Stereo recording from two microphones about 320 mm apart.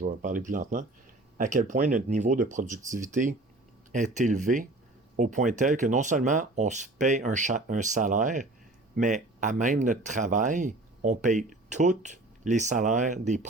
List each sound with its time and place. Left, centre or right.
0.0 s speech: right